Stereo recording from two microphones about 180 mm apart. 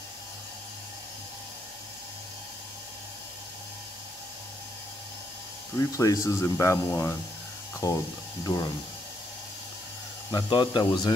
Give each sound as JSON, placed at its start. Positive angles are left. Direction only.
{"t": 5.8, "sound": "speech", "side_deg": 20}
{"t": 10.3, "sound": "speech", "side_deg": 25}